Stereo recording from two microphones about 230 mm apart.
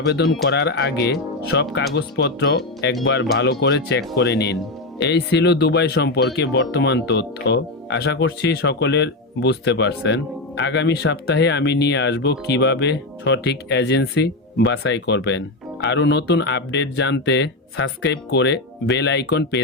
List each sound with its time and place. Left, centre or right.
0.4 s speech: left